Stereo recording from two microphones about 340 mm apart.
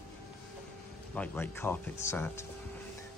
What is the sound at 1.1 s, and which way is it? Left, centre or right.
Speech, centre.